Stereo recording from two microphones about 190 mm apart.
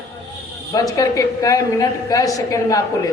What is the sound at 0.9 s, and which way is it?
A man's voice, 20° left (ahead or behind).